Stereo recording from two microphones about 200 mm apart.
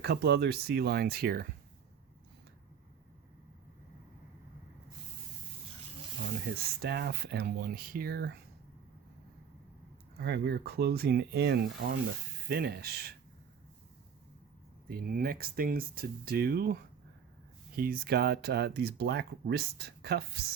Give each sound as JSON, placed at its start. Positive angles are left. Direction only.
{"t": 0.0, "sound": "speech", "side_deg": -55}
{"t": 6.8, "sound": "speech", "side_deg": -55}
{"t": 10.2, "sound": "speech", "side_deg": -55}
{"t": 14.8, "sound": "speech", "side_deg": -50}
{"t": 17.7, "sound": "speech", "side_deg": -45}